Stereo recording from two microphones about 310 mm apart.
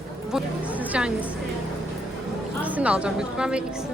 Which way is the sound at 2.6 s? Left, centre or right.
Centre.